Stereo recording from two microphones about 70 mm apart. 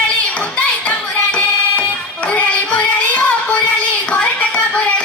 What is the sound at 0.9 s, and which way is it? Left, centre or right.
Music, centre.